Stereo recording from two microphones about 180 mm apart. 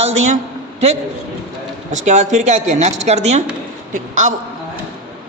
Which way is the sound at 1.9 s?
40° right (ahead or behind).